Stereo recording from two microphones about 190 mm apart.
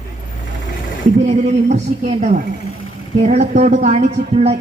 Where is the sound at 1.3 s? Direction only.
35° right (ahead or behind).